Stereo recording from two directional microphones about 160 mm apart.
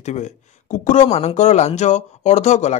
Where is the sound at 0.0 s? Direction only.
45° left (ahead or behind).